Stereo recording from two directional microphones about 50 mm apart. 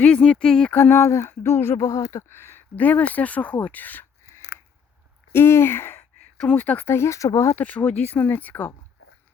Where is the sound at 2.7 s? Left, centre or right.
Left.